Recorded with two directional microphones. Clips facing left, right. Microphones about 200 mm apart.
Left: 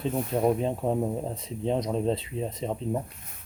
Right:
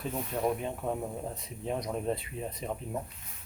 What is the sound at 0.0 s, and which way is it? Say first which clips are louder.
Speech: left 6 dB; 25° left (ahead or behind).